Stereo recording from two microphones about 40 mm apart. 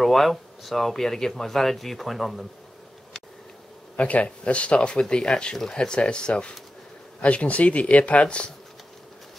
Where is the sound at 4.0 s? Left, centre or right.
Left.